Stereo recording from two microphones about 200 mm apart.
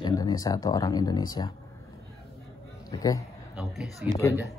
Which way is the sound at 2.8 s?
15° left (ahead or behind).